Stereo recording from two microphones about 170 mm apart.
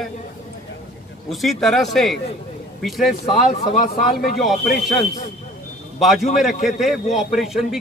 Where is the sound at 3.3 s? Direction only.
45° left (ahead or behind).